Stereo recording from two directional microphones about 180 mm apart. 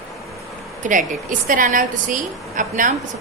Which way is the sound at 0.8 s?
45° right (ahead or behind).